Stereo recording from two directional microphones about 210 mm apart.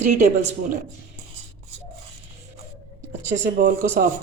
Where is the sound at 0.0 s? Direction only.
35° right (ahead or behind).